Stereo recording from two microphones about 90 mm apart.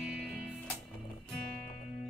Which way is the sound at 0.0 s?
5° right (ahead or behind).